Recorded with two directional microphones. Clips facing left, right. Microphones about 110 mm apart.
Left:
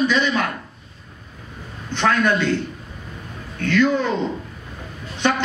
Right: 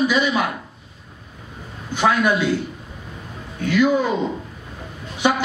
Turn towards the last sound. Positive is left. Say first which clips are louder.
# right 1 dB
turn(degrees=-10)  # may be behind; listen again after turning